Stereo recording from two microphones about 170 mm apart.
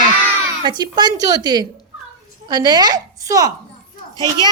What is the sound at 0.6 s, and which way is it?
Speech, 25° right (ahead or behind).